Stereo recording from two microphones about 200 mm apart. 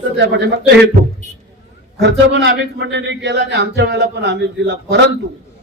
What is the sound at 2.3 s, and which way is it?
Speech, 60° right (ahead or behind).